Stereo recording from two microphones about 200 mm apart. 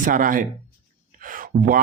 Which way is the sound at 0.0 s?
45° right (ahead or behind).